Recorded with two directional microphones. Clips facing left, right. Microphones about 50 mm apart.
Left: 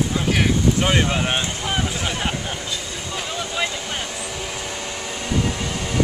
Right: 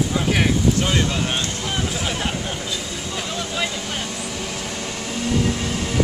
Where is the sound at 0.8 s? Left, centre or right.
Left.